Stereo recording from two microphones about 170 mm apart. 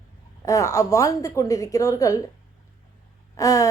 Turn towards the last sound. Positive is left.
turn(degrees=20)  # may be behind; listen again after turning